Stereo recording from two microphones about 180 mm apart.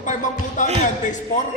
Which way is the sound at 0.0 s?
45° left (ahead or behind).